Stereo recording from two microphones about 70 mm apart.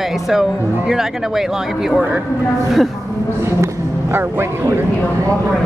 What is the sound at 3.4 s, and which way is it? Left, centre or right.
Speech, right.